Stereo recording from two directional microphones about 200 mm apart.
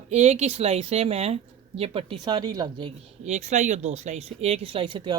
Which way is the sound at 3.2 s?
35° right (ahead or behind).